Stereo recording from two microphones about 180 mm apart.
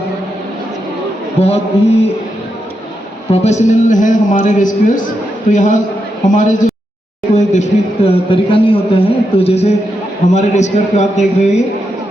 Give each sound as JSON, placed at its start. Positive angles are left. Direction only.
{"t": 1.4, "sound": "a man's voice", "side_deg": 35}
{"t": 3.2, "sound": "a man's voice", "side_deg": 35}